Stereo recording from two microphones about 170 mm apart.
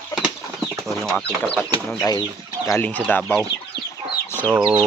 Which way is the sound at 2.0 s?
20° left (ahead or behind).